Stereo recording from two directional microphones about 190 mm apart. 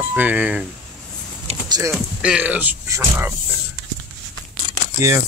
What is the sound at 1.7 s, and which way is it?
Speech, 20° right (ahead or behind).